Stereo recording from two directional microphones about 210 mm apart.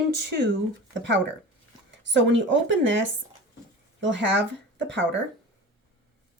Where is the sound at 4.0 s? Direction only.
60° right (ahead or behind).